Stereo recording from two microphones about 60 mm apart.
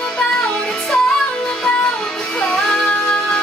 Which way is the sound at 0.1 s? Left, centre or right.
Centre.